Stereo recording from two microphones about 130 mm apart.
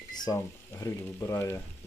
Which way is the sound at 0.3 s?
25° left (ahead or behind).